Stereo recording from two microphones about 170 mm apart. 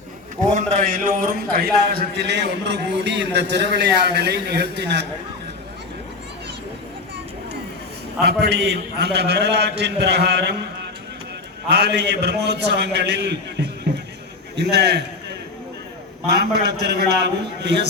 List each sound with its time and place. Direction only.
0.5 s a man's voice: 55° right (ahead or behind); by 5.0 s 90° right
8.2 s a man's voice: 70° right (ahead or behind)
11.7 s a man's voice: 80° right
16.3 s a man's voice: 75° right (ahead or behind)